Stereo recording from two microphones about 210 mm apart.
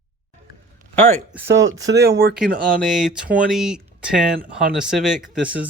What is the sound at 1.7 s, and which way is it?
Speech, 55° right (ahead or behind).